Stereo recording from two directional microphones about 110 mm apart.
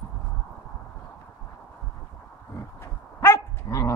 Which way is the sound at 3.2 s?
30° left (ahead or behind).